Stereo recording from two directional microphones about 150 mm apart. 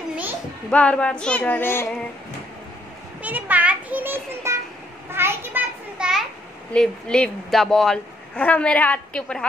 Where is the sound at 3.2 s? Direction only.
10° right (ahead or behind).